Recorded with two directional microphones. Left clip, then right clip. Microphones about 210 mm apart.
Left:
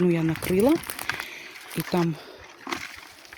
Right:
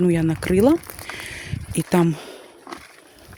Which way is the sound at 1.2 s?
30° right (ahead or behind).